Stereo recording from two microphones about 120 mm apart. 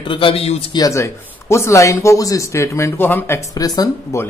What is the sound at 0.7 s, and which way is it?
Speech, 30° left (ahead or behind).